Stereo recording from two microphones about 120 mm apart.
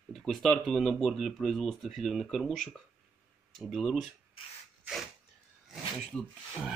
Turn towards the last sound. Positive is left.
turn(degrees=0)  # may be behind; listen again after turning